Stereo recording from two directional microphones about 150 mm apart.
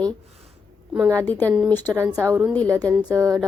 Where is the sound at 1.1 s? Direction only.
10° left (ahead or behind).